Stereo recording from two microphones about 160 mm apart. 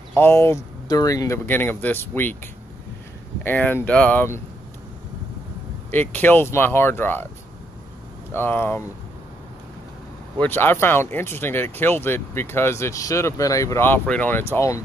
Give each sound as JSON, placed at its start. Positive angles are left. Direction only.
{"t": 0.1, "sound": "speech", "side_deg": 15}
{"t": 5.9, "sound": "speech", "side_deg": 10}
{"t": 8.3, "sound": "speech", "side_deg": 15}
{"t": 10.4, "sound": "speech", "side_deg": 15}